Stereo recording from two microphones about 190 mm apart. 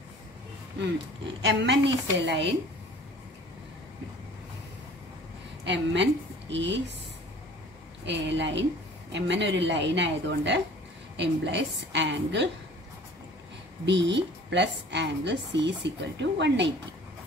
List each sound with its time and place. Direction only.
0.7 s a woman's voice: 70° right (ahead or behind)
5.6 s a woman's voice: 70° right (ahead or behind)
8.0 s a woman's voice: 70° right (ahead or behind)
13.8 s a woman's voice: 70° right (ahead or behind)